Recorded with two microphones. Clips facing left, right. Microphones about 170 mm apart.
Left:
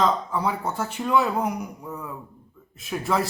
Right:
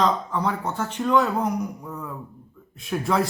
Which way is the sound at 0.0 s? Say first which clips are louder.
Even; 5° left (ahead or behind).